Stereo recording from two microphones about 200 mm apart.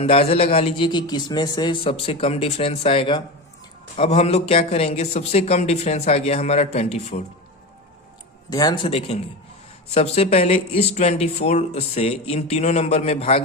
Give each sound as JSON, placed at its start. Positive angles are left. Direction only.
{"t": 0.0, "sound": "a man's voice", "side_deg": 30}
{"t": 8.4, "sound": "a man's voice", "side_deg": 20}